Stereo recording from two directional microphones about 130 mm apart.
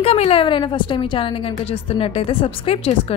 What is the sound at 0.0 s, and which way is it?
A woman's voice, 50° left (ahead or behind).